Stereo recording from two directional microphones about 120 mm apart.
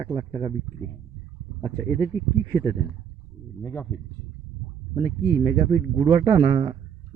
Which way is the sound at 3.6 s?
20° left (ahead or behind).